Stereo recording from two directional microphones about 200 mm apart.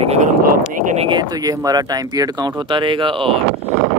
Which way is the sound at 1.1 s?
20° right (ahead or behind).